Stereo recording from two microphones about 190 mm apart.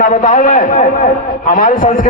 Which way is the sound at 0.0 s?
45° left (ahead or behind).